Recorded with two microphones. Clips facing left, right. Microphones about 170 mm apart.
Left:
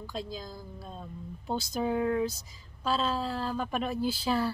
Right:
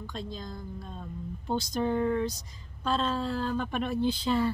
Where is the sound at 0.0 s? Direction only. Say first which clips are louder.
Even; 5° left (ahead or behind).